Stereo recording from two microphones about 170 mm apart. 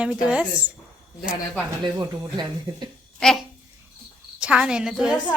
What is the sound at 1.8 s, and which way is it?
Speech, 20° right (ahead or behind).